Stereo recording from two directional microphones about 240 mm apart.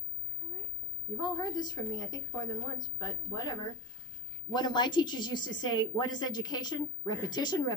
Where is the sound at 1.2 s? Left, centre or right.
Centre.